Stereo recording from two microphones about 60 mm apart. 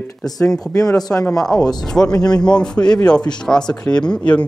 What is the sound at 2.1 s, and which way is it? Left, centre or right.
Speech, left.